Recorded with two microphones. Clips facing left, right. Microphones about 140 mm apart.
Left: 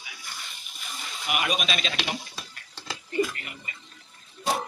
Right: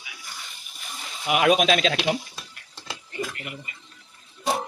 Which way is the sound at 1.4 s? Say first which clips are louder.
Right 11 dB; 90° right.